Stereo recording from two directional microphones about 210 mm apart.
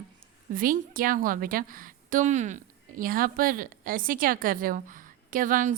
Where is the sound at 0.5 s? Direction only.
40° right (ahead or behind).